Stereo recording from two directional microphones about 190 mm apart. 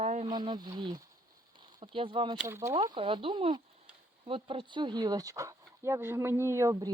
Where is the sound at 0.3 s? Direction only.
20° right (ahead or behind).